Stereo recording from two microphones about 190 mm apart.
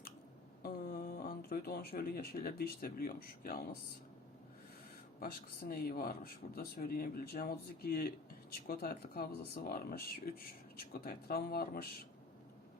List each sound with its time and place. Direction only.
0.6 s speech: 50° left (ahead or behind)
5.2 s speech: 50° left (ahead or behind)